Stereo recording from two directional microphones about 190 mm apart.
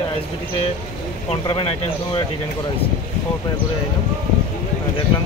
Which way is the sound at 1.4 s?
25° left (ahead or behind).